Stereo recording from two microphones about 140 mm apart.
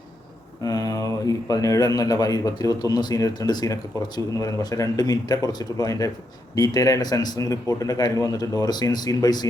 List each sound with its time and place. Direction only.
0.6 s a man's voice: 25° left (ahead or behind)